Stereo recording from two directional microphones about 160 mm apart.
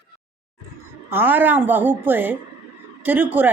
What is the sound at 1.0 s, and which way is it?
A woman's voice, 15° right (ahead or behind).